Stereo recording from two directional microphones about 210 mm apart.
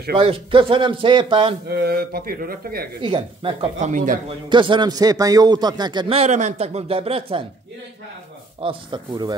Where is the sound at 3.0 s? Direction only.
25° right (ahead or behind).